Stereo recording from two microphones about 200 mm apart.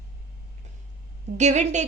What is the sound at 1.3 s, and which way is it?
Speech, 35° right (ahead or behind).